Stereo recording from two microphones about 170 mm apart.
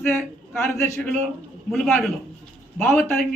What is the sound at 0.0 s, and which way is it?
A man's voice, 10° left (ahead or behind).